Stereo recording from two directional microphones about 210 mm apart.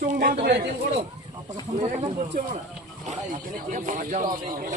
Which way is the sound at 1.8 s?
30° right (ahead or behind).